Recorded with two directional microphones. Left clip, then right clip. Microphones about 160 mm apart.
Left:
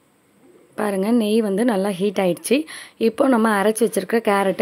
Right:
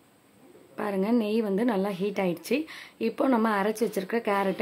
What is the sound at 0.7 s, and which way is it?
A woman's voice, 35° left (ahead or behind).